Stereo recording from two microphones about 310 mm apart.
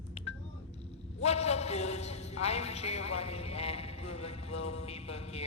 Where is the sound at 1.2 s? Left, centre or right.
Left.